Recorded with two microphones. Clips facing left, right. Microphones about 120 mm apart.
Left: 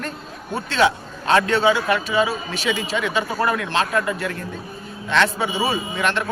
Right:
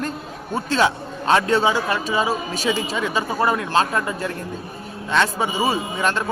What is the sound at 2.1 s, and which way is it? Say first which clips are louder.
A man's voice: left 1 dB; 40° right (ahead or behind).